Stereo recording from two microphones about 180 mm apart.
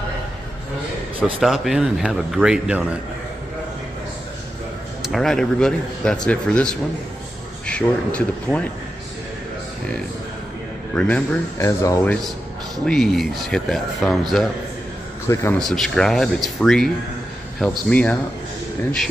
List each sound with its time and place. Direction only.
1.4 s speech: centre (ahead or behind)
5.0 s speech: centre (ahead or behind)
11.0 s speech: 5° left (ahead or behind)
12.7 s speech: 5° left (ahead or behind)
15.3 s speech: 20° left (ahead or behind)
15.6 s speech: centre (ahead or behind)